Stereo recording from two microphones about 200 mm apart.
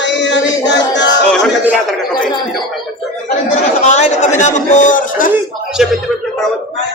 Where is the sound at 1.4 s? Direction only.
Centre (ahead or behind).